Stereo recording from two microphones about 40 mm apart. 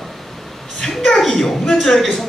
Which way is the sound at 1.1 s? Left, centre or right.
Centre.